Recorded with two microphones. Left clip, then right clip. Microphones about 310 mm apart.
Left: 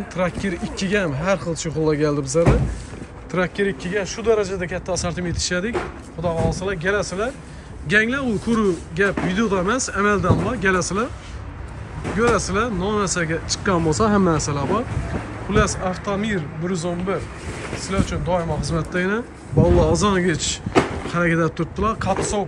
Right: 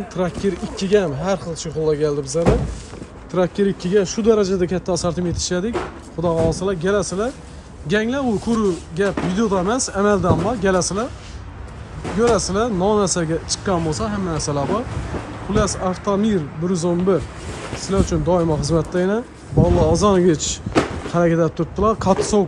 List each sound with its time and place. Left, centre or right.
0.1 s speech: centre
3.8 s speech: right
12.4 s speech: centre